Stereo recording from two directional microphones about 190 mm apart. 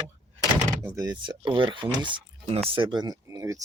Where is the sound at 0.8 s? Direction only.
20° right (ahead or behind).